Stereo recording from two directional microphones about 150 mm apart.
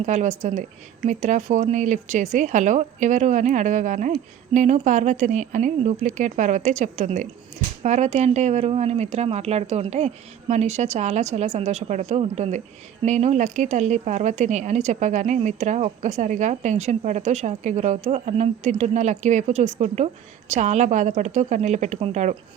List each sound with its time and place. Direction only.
0.0 s speech: 50° right (ahead or behind)